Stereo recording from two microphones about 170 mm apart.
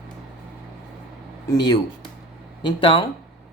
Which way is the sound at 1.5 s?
25° left (ahead or behind).